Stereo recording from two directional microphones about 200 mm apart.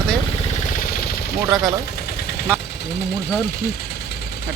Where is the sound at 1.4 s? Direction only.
20° right (ahead or behind).